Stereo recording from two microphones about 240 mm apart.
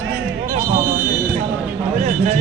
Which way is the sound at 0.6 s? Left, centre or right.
Centre.